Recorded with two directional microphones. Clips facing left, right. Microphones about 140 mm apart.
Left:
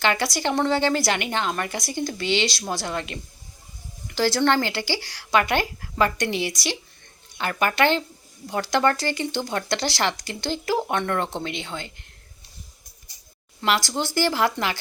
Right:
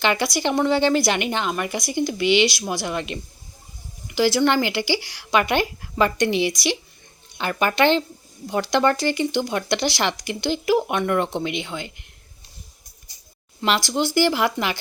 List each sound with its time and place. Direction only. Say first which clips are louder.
0.0 s speech: right 2 dB; 15° right (ahead or behind)
13.6 s speech: right 2 dB; 15° right (ahead or behind)